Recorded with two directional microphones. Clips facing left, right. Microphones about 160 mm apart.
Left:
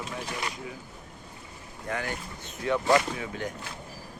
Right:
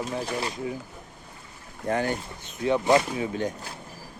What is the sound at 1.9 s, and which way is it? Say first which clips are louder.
Speech: right 7 dB; 35° right (ahead or behind).